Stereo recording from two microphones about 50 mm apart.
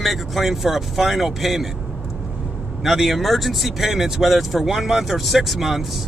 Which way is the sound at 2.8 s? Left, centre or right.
Centre.